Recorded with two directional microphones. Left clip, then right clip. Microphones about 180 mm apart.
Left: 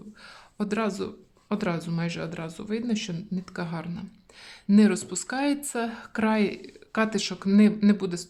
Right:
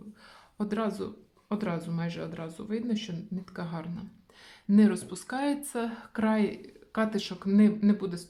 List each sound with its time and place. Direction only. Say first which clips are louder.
0.6 s speech: left 4 dB; 25° left (ahead or behind)